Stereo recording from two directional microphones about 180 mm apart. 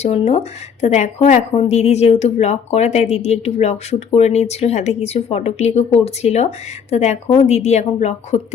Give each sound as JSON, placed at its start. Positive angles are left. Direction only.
{"t": 0.0, "sound": "speech", "side_deg": 35}